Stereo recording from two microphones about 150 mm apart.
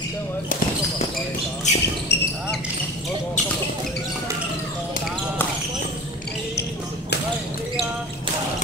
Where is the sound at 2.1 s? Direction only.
90° left.